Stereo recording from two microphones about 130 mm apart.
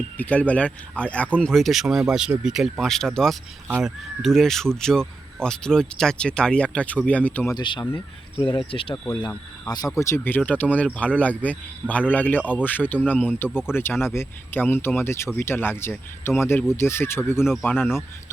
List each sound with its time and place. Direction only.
0.2 s speech: 10° left (ahead or behind)
7.5 s speech: 35° left (ahead or behind)
9.6 s speech: 30° left (ahead or behind)